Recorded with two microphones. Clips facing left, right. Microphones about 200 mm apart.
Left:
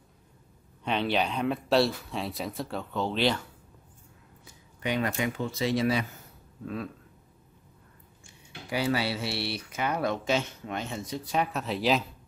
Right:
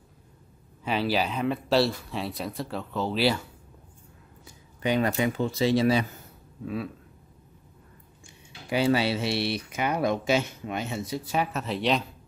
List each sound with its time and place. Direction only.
0.8 s speech: 5° right (ahead or behind)
4.8 s speech: 30° right (ahead or behind)
6.6 s speech: 5° right (ahead or behind)
8.6 s speech: 25° right (ahead or behind); by 12.1 s centre (ahead or behind)